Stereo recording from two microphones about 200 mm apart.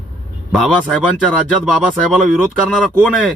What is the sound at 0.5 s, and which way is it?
Speech, centre (ahead or behind).